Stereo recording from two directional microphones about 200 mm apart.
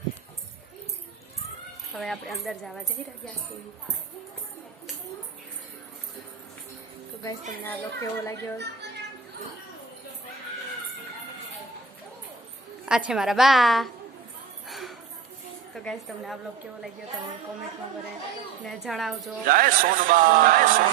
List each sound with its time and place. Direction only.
1.9 s speech: centre (ahead or behind)
7.6 s a child's voice: 10° left (ahead or behind)
8.5 s speech: 60° right (ahead or behind)
13.1 s speech: centre (ahead or behind)
14.7 s a sound: centre (ahead or behind)
15.7 s speech: 5° left (ahead or behind)
18.6 s speech: centre (ahead or behind)
19.5 s a man's voice: 45° right (ahead or behind)